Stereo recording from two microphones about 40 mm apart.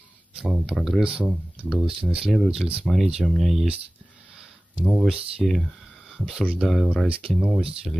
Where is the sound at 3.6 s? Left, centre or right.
Centre.